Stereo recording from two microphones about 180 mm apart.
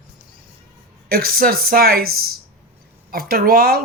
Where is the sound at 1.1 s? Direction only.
55° right (ahead or behind).